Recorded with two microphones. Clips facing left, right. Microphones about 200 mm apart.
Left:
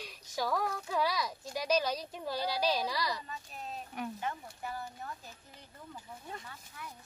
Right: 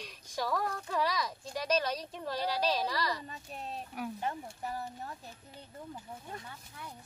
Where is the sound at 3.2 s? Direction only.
35° right (ahead or behind).